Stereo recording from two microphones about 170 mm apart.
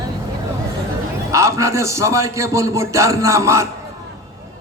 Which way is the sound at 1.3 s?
15° right (ahead or behind).